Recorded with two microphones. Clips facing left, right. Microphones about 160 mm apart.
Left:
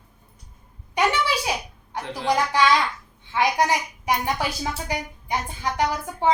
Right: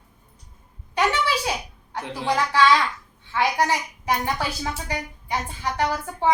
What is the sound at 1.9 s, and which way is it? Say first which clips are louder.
A woman's voice: left 1 dB; 15° left (ahead or behind).